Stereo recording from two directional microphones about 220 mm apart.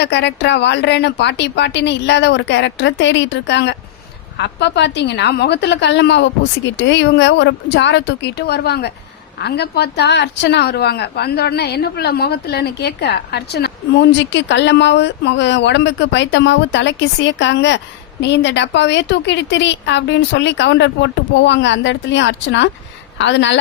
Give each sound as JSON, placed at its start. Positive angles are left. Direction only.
{"t": 0.0, "sound": "a woman's voice", "side_deg": 50}